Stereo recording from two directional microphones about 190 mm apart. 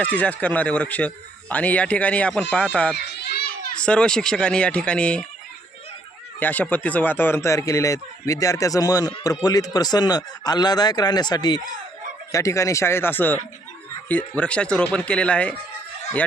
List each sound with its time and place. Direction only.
0.0 s speech: 5° left (ahead or behind)
3.0 s children playing: 60° left (ahead or behind)
3.8 s speech: 5° left (ahead or behind)
6.4 s speech: 10° left (ahead or behind)